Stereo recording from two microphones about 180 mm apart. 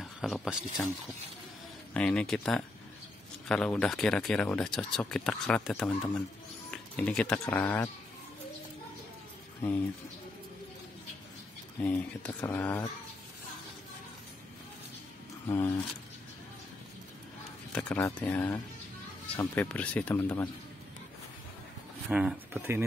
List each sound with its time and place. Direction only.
0.0 s speech: centre (ahead or behind)
2.0 s speech: 5° left (ahead or behind)
6.7 s a sound: 5° left (ahead or behind)
7.3 s speech: 15° left (ahead or behind)
11.8 s speech: 10° left (ahead or behind)
15.4 s speech: 15° left (ahead or behind)
17.7 s speech: 5° left (ahead or behind)
22.1 s speech: 5° right (ahead or behind)